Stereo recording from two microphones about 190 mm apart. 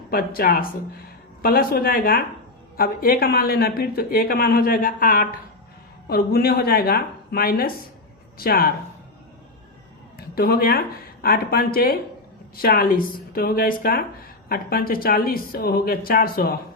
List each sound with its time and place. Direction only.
0.1 s speech: 50° left (ahead or behind)
10.2 s speech: 50° left (ahead or behind)